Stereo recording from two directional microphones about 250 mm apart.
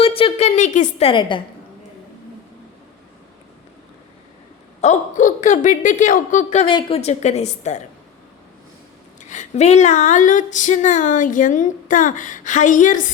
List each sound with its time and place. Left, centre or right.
0.0 s a woman's voice: left
4.8 s a woman's voice: left
9.3 s a sound: left